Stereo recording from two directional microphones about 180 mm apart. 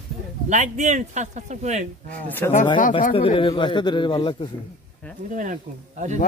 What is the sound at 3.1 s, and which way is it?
A man's voice, 30° left (ahead or behind).